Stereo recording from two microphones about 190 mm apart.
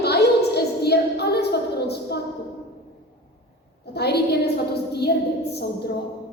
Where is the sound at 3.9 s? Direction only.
60° left (ahead or behind).